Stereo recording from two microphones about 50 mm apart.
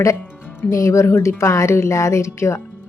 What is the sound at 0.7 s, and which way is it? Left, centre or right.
Speech, left.